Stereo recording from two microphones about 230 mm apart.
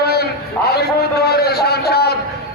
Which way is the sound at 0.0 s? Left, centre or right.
Left.